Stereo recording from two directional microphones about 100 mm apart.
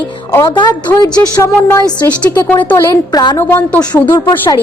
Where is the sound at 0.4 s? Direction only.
45° left (ahead or behind).